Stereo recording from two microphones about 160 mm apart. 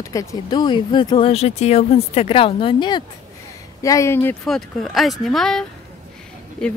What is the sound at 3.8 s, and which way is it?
Speech, 20° left (ahead or behind).